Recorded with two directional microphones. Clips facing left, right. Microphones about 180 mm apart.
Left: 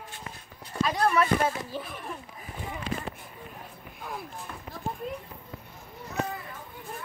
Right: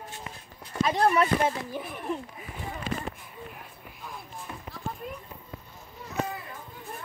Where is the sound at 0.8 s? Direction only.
20° right (ahead or behind).